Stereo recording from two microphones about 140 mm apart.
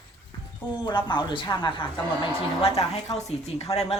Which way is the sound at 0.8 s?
35° left (ahead or behind).